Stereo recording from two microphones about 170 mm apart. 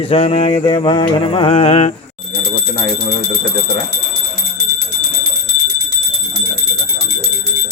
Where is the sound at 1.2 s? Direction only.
30° left (ahead or behind).